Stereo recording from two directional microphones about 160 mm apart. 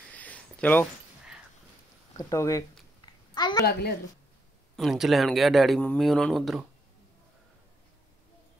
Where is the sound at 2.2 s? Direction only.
20° left (ahead or behind).